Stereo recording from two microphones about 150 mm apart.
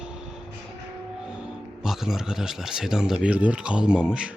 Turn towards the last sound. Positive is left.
turn(degrees=-5)  # may be behind; listen again after turning